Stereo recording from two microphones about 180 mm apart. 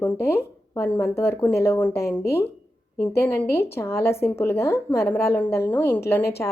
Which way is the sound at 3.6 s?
15° left (ahead or behind).